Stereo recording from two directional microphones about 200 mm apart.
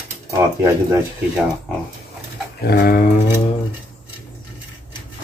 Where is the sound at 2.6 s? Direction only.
50° left (ahead or behind).